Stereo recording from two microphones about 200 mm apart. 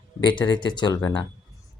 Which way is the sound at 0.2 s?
20° left (ahead or behind).